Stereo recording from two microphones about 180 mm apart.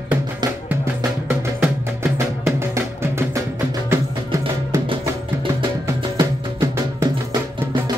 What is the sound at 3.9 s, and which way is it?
Music, 15° right (ahead or behind).